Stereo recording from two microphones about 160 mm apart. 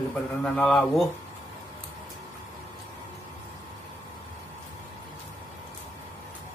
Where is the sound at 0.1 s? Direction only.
5° left (ahead or behind).